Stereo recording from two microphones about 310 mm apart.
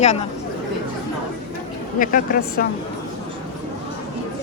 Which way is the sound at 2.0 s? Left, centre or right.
Left.